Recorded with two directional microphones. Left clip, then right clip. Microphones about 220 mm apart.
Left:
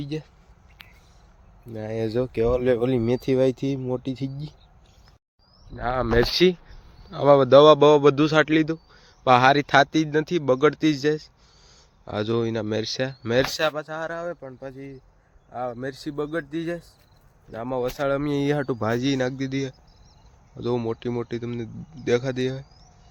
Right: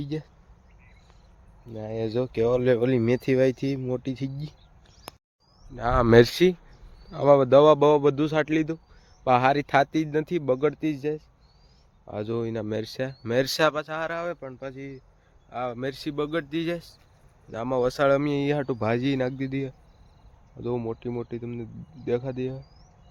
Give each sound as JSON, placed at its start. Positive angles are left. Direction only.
{"t": 0.0, "sound": "speech", "side_deg": -5}
{"t": 1.7, "sound": "speech", "side_deg": 15}
{"t": 6.0, "sound": "speech", "side_deg": -50}
{"t": 7.1, "sound": "a man's voice", "side_deg": 0}
{"t": 14.4, "sound": "speech", "side_deg": -10}
{"t": 15.5, "sound": "speech", "side_deg": 0}
{"t": 17.7, "sound": "speech", "side_deg": -35}
{"t": 18.3, "sound": "speech", "side_deg": 10}
{"t": 20.6, "sound": "a man's voice", "side_deg": 15}